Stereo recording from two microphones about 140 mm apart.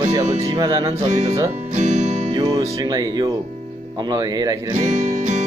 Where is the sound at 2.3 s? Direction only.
30° right (ahead or behind).